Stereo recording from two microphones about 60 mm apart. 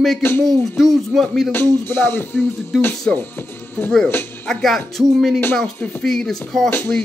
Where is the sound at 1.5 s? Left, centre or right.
Left.